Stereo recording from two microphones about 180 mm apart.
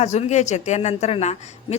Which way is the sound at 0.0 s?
40° left (ahead or behind).